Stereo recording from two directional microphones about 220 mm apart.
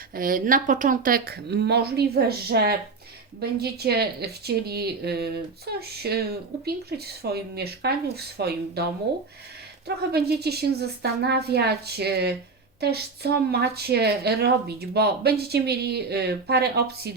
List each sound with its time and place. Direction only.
0.1 s a woman's voice: 40° right (ahead or behind)